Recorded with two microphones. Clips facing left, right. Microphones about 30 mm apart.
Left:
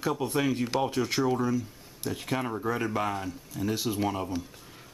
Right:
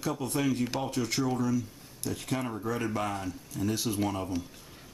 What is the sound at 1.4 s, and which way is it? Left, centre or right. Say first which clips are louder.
Speech: left 1 dB; left.